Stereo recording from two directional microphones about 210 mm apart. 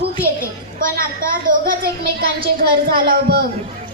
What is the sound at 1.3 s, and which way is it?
A woman's voice, 40° right (ahead or behind).